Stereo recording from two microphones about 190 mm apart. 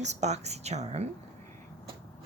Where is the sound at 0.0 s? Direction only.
35° right (ahead or behind).